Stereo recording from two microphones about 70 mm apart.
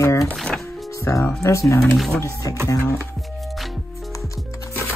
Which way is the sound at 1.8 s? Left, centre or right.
Centre.